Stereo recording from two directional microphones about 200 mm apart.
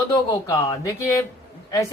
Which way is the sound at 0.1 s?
15° left (ahead or behind).